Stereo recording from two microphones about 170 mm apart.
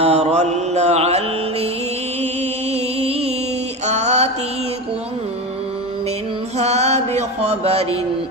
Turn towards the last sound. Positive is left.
turn(degrees=-35)  # may be behind; listen again after turning